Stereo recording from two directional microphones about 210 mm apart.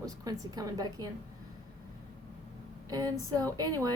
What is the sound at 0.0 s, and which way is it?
Speech, 15° right (ahead or behind).